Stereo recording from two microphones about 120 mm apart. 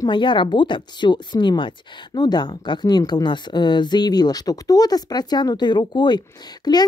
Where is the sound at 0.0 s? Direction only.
40° left (ahead or behind).